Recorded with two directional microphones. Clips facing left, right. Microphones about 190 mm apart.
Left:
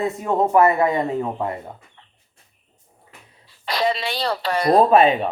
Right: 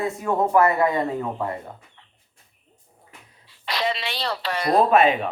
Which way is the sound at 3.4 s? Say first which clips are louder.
Left 4 dB; 40° left (ahead or behind).